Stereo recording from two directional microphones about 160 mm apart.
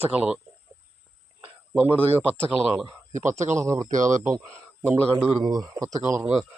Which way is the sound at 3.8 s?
50° right (ahead or behind).